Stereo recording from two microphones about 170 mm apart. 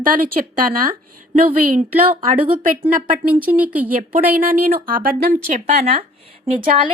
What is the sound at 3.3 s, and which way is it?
Speech, 10° right (ahead or behind).